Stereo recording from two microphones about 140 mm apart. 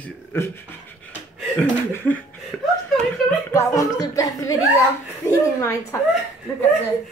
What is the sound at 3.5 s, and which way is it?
Speech, 20° left (ahead or behind).